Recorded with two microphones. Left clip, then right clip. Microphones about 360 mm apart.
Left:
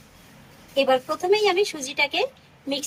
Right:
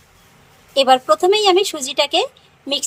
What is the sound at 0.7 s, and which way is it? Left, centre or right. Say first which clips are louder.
A woman's voice: right 8 dB; centre.